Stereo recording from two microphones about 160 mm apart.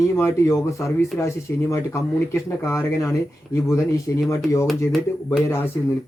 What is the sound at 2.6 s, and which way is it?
Speech, 20° left (ahead or behind).